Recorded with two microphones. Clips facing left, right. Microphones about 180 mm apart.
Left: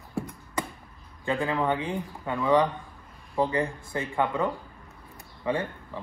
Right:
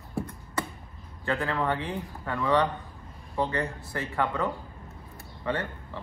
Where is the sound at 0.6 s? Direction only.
15° left (ahead or behind).